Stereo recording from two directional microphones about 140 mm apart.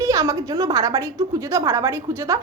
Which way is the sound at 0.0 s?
20° right (ahead or behind).